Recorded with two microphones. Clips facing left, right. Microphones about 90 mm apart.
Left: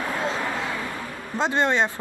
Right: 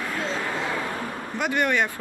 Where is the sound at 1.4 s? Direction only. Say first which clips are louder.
Left 2 dB; 25° left (ahead or behind).